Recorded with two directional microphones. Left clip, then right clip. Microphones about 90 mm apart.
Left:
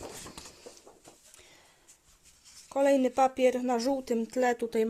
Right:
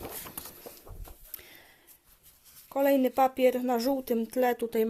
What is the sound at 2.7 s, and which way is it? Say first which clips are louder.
Speech: even; 5° right (ahead or behind).